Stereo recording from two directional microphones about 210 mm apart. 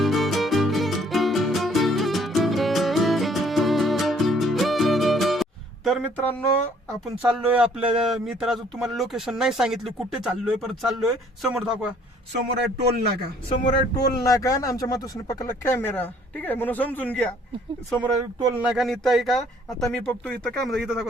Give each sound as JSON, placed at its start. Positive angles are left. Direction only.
{"t": 0.0, "sound": "music", "side_deg": 0}
{"t": 7.3, "sound": "speech", "side_deg": -5}
{"t": 12.3, "sound": "a man's voice", "side_deg": -50}
{"t": 13.9, "sound": "speech", "side_deg": 15}
{"t": 18.3, "sound": "speech", "side_deg": -15}
{"t": 18.6, "sound": "speech", "side_deg": 0}